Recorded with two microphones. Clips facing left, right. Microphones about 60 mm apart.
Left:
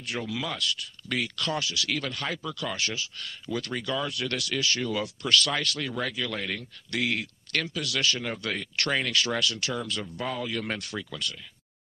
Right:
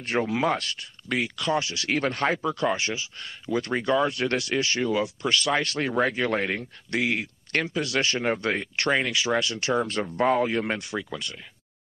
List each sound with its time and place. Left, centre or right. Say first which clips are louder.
0.0 s speech: right 8 dB; right
1.0 s speech: right 4 dB; right
10.6 s speech: right 4 dB; right